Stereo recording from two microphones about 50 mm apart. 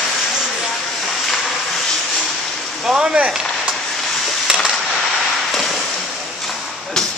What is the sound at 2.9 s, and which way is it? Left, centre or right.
Speech, centre.